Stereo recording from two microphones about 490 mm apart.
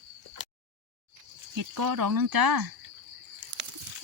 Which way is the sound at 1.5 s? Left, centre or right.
Right.